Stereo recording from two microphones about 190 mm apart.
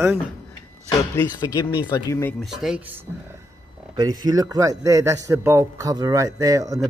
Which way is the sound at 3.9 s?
20° right (ahead or behind).